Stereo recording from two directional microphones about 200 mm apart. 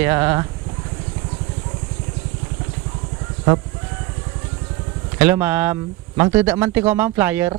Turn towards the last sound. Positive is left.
turn(degrees=-10)  # may be behind; listen again after turning